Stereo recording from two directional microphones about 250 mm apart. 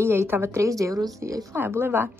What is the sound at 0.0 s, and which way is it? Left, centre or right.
A woman's voice, centre.